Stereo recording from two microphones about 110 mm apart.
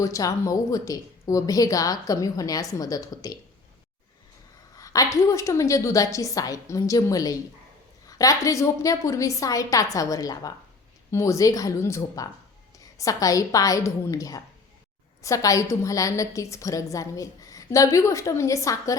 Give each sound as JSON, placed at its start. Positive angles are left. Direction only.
{"t": 0.0, "sound": "a woman's voice", "side_deg": 30}
{"t": 4.8, "sound": "a woman's voice", "side_deg": 30}